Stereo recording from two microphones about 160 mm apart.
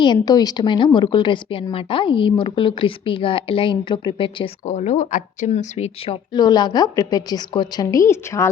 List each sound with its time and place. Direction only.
0.0 s a woman's voice: 25° left (ahead or behind)
4.6 s speech: 50° left (ahead or behind)
6.3 s a woman's voice: 25° left (ahead or behind)